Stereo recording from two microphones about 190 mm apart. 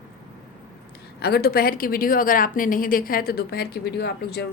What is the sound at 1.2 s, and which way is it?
A woman's voice, 55° left (ahead or behind).